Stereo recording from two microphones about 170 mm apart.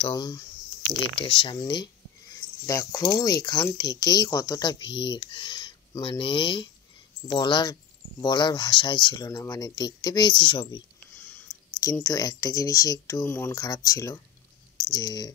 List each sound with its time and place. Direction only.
0.0 s speech: 25° left (ahead or behind)